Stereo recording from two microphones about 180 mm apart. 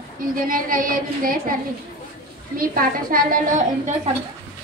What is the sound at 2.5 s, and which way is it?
A woman's voice, 50° right (ahead or behind).